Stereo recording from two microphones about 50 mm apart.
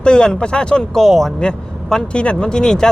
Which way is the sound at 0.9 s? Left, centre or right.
Centre.